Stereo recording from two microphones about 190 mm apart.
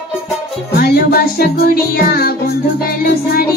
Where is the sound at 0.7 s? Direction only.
55° left (ahead or behind).